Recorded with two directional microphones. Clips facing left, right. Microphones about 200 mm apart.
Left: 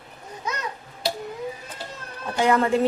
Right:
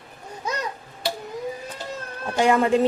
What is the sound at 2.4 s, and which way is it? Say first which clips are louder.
Speech: right 2 dB; 15° right (ahead or behind).